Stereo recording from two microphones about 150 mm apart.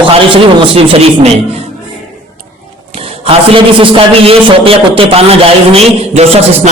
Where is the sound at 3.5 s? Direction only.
35° right (ahead or behind).